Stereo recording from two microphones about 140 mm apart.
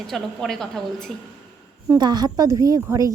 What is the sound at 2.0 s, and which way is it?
A woman's voice, 30° right (ahead or behind).